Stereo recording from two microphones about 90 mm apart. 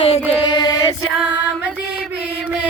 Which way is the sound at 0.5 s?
55° left (ahead or behind).